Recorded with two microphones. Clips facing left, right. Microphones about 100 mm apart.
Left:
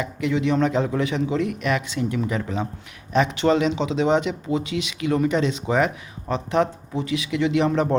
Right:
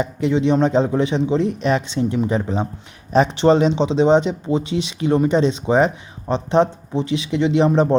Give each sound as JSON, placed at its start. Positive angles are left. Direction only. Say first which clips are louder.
{"t": 0.0, "sound": "speech", "louder": "right 5 dB", "side_deg": -30}